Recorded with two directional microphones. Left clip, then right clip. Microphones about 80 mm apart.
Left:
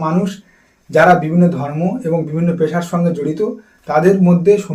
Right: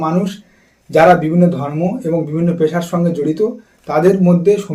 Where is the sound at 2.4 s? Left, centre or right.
Right.